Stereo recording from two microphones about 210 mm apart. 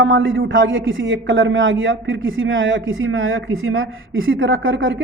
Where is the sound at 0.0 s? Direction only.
70° right (ahead or behind).